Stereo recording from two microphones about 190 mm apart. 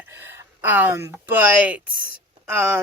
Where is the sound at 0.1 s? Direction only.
10° right (ahead or behind).